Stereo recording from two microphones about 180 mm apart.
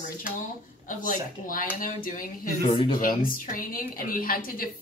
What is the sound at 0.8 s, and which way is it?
A woman's voice, 50° left (ahead or behind).